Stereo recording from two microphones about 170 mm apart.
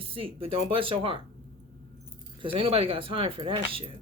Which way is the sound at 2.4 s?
35° right (ahead or behind).